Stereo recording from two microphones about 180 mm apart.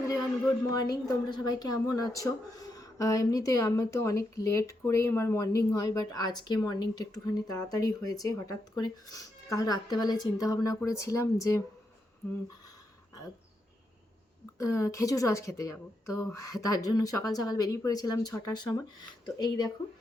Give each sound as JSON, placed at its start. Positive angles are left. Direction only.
{"t": 0.1, "sound": "speech", "side_deg": 20}
{"t": 14.6, "sound": "speech", "side_deg": 15}